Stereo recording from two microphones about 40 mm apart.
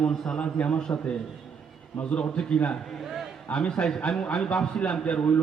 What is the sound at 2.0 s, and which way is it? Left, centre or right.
A man's voice, left.